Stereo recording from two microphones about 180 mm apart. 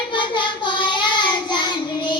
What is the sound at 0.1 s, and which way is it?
Child singing, 25° left (ahead or behind).